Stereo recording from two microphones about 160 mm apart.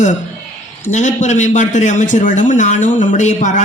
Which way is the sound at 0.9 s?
50° left (ahead or behind).